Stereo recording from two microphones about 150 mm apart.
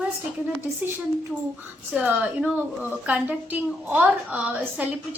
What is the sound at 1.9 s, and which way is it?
A woman's voice, 10° right (ahead or behind).